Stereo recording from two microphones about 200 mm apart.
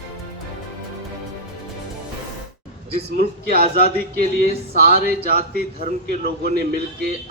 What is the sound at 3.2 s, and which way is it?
A man's voice, 50° right (ahead or behind).